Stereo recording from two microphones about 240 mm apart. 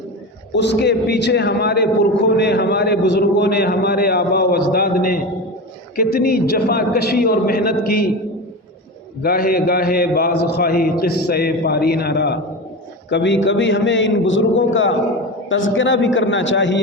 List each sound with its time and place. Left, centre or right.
0.5 s a man's voice: left
9.2 s a man's voice: left